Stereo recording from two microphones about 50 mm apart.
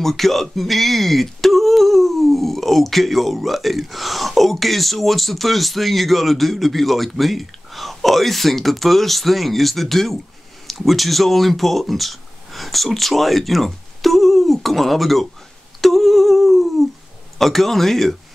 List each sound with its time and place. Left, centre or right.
0.0 s speech: centre
15.8 s humming: centre
17.4 s speech: centre